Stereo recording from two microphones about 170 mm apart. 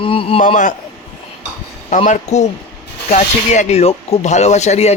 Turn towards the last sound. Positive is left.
turn(degrees=40)  # may be behind; listen again after turning